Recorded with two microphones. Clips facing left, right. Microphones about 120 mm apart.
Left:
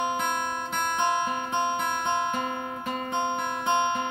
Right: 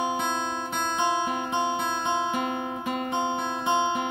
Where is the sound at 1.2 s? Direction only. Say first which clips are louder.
Right 1 dB; 10° right (ahead or behind).